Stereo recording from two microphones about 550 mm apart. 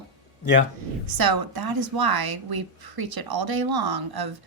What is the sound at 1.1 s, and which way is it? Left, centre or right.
A woman's voice, right.